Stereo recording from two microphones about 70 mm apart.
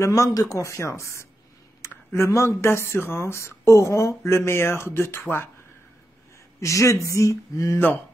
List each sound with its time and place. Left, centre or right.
0.0 s speech: left
1.8 s a sound: left
2.1 s speech: left
6.6 s speech: left